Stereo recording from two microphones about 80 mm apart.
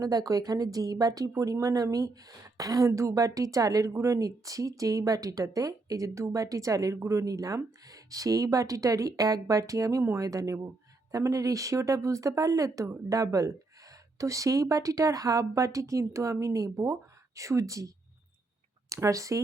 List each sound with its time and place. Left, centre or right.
0.0 s speech: right